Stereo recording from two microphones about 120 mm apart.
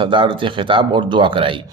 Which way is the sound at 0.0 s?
45° right (ahead or behind).